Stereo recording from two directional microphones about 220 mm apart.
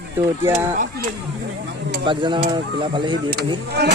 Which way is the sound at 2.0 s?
20° right (ahead or behind).